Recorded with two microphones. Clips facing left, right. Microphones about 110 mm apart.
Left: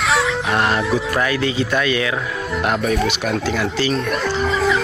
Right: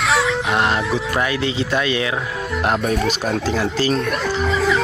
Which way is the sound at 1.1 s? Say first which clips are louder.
Left 1 dB; 25° right (ahead or behind).